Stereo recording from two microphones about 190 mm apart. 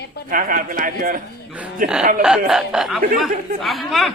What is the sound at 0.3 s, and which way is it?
A man's voice, 45° right (ahead or behind).